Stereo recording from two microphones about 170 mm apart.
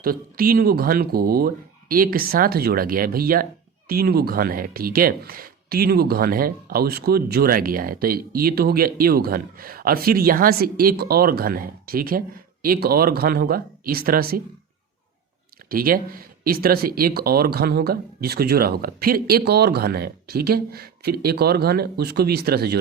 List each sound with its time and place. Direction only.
0.0 s speech: 60° right (ahead or behind)
15.7 s speech: 60° right (ahead or behind)